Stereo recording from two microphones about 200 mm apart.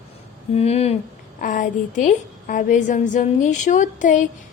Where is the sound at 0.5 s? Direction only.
30° left (ahead or behind).